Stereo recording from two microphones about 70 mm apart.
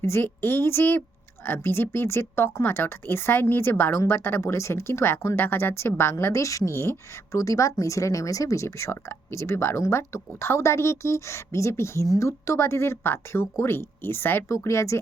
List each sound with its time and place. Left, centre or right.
0.0 s speech: left
12.0 s speech: left
12.5 s speech: left